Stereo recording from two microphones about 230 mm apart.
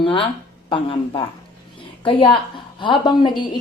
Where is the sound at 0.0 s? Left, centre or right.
Left.